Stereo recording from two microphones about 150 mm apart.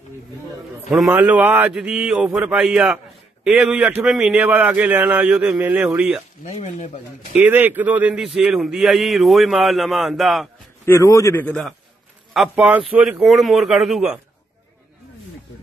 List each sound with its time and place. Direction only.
1.1 s a man's voice: 10° right (ahead or behind)
6.4 s speech: 50° left (ahead or behind)
7.3 s a man's voice: 10° right (ahead or behind)
10.9 s a man's voice: 20° left (ahead or behind)
12.4 s a man's voice: 5° right (ahead or behind)